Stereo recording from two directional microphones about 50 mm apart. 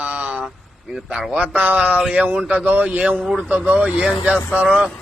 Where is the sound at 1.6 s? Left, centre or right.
Right.